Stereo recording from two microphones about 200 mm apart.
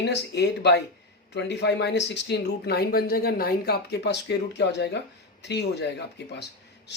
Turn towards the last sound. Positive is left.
turn(degrees=60)  # may be behind; listen again after turning